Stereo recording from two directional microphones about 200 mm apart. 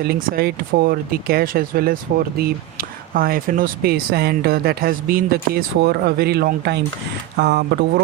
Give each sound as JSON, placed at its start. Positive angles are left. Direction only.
{"t": 0.1, "sound": "speech", "side_deg": -50}